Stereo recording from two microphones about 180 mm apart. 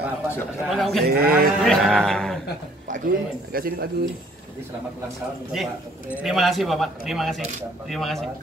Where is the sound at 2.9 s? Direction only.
55° right (ahead or behind).